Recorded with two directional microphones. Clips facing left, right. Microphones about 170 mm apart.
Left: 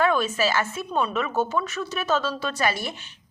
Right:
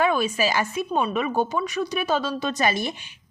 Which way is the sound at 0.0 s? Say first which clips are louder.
Even; 10° right (ahead or behind).